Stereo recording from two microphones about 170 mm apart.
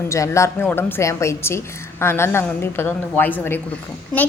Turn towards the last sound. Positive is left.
turn(degrees=10)  # may be behind; listen again after turning